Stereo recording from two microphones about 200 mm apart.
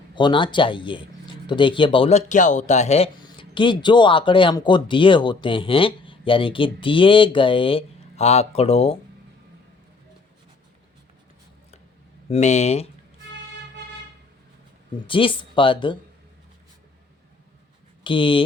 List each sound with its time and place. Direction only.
0.1 s speech: 25° left (ahead or behind)
12.3 s speech: 35° left (ahead or behind)
15.0 s speech: 25° left (ahead or behind)
18.0 s speech: 25° left (ahead or behind)